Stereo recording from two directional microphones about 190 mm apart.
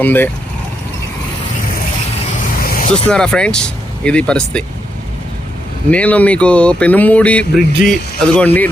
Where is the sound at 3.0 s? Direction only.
5° left (ahead or behind).